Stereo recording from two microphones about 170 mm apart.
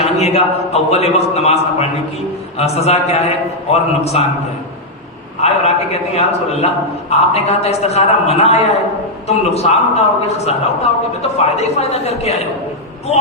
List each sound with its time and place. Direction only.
0.0 s a man's voice: 40° left (ahead or behind)
5.4 s a man's voice: 40° left (ahead or behind)